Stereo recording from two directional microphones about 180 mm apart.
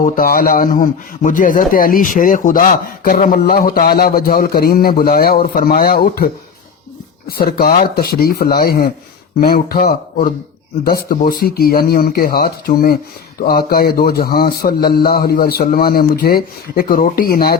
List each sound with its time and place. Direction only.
0.0 s a man's voice: 55° left (ahead or behind)